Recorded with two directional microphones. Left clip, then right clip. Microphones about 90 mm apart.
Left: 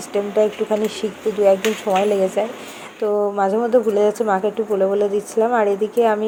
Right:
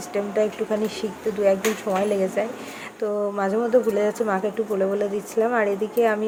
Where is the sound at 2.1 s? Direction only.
30° left (ahead or behind).